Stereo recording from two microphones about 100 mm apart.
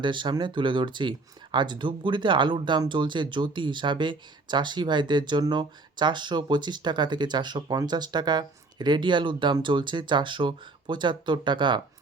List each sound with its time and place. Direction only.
0.0 s speech: 50° right (ahead or behind)